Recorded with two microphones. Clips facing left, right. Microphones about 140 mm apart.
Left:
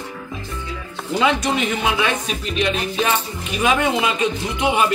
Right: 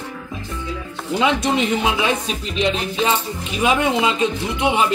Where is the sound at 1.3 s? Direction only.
25° right (ahead or behind).